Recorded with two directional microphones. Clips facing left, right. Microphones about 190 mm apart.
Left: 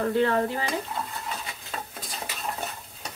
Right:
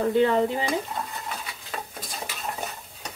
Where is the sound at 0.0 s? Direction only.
15° right (ahead or behind).